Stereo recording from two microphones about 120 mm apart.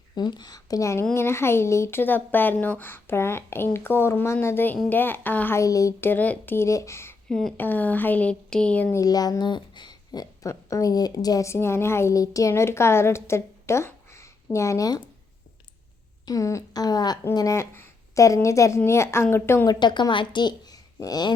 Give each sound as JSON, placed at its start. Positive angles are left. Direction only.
{"t": 0.2, "sound": "a woman's voice", "side_deg": 35}
{"t": 5.5, "sound": "speech", "side_deg": 30}
{"t": 6.1, "sound": "speech", "side_deg": 15}
{"t": 7.3, "sound": "speech", "side_deg": 5}
{"t": 7.5, "sound": "speech", "side_deg": 15}
{"t": 9.0, "sound": "speech", "side_deg": 30}
{"t": 16.2, "sound": "a woman's voice", "side_deg": 30}
{"t": 19.6, "sound": "speech", "side_deg": 40}